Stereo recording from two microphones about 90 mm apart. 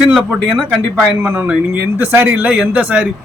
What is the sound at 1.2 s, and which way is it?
Speech, 25° right (ahead or behind).